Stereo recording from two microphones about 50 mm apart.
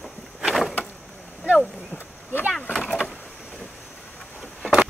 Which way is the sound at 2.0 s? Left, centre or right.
Left.